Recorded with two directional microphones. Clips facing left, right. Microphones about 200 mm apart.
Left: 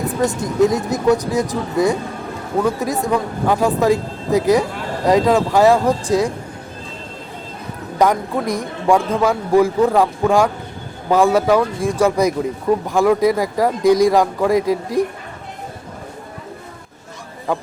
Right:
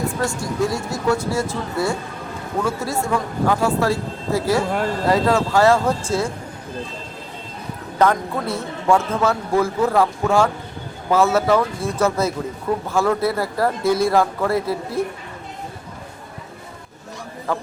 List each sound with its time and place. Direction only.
0.2 s a man's voice: 20° left (ahead or behind)
7.9 s a man's voice: 15° left (ahead or behind)